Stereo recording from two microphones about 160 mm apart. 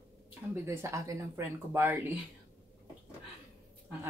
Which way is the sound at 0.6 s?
15° right (ahead or behind).